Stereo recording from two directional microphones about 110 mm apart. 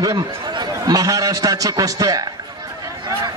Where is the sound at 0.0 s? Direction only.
30° right (ahead or behind).